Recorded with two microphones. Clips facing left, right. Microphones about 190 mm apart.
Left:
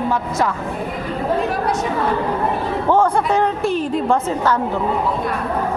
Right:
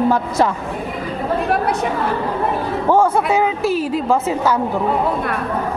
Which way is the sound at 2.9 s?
10° right (ahead or behind).